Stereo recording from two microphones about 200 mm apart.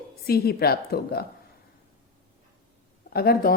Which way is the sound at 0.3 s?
50° left (ahead or behind).